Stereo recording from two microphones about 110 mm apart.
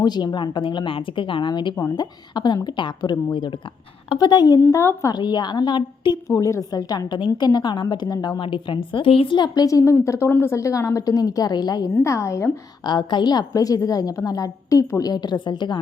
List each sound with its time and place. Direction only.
0.0 s a woman's voice: 40° left (ahead or behind)
4.6 s a woman's voice: 25° left (ahead or behind)
5.1 s a woman's voice: 40° left (ahead or behind)
6.2 s a woman's voice: 30° left (ahead or behind)
8.4 s a woman's voice: 50° left (ahead or behind); by 12.5 s 25° left (ahead or behind)
12.8 s a woman's voice: 40° left (ahead or behind)